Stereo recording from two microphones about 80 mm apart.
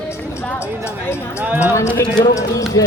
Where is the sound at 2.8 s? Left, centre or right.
Left.